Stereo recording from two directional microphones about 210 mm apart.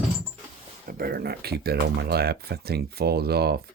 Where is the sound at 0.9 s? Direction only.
45° right (ahead or behind).